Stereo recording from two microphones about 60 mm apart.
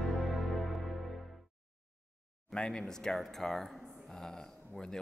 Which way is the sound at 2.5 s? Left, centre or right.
Centre.